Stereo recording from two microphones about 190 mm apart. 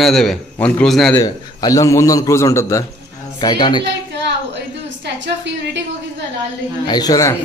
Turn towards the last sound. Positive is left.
turn(degrees=20)  # may be behind; listen again after turning